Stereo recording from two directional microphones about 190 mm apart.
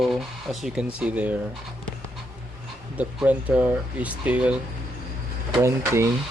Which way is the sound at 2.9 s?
5° right (ahead or behind).